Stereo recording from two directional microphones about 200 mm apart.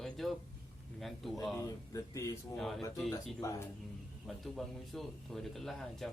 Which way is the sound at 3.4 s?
15° left (ahead or behind).